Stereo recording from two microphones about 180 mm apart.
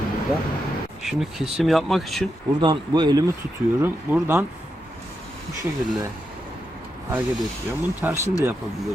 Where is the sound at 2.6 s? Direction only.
25° right (ahead or behind).